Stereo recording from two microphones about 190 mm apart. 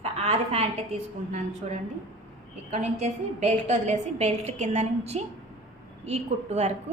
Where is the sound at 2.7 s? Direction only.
35° right (ahead or behind).